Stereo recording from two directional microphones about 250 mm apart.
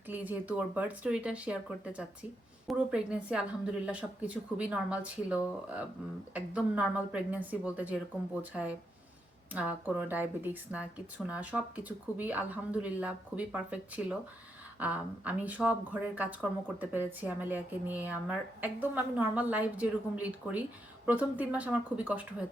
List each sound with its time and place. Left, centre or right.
0.1 s a woman's voice: centre